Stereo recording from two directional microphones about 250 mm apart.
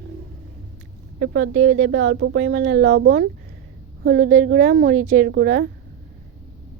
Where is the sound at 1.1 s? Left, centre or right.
Right.